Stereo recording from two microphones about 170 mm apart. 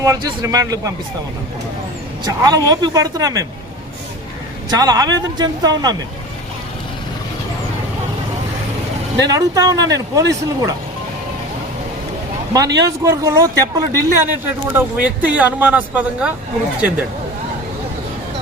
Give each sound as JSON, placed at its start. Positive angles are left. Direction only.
{"t": 0.0, "sound": "speech", "side_deg": -20}
{"t": 2.2, "sound": "speech", "side_deg": -25}
{"t": 4.7, "sound": "speech", "side_deg": -20}
{"t": 9.2, "sound": "speech", "side_deg": -20}
{"t": 12.5, "sound": "speech", "side_deg": -20}